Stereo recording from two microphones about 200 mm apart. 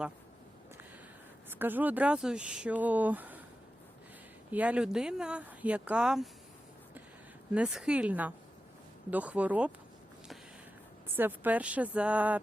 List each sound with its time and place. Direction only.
1.5 s speech: 10° right (ahead or behind)
4.5 s speech: 5° right (ahead or behind)
7.5 s speech: 5° right (ahead or behind)
11.2 s speech: 10° right (ahead or behind)